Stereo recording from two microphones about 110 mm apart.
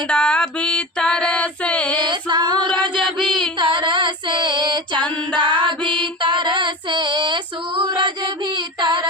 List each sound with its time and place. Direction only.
0.1 s female singing: 10° left (ahead or behind)
2.0 s female singing: 45° right (ahead or behind)
3.2 s a sound: centre (ahead or behind)
3.6 s female singing: 50° right (ahead or behind)
8.5 s child singing: 45° right (ahead or behind)